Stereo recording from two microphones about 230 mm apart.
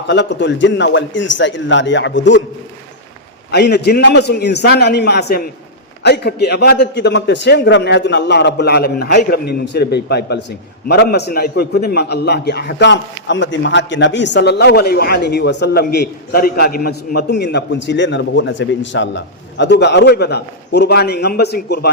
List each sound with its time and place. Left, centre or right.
0.1 s a man's voice: left
3.5 s a man's voice: left